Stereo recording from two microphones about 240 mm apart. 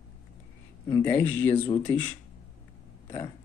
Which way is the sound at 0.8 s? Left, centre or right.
Centre.